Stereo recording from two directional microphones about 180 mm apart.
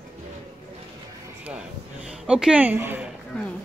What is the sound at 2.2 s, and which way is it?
Speech, 5° right (ahead or behind).